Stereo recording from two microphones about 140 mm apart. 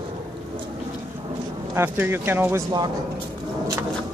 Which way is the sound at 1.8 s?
15° right (ahead or behind).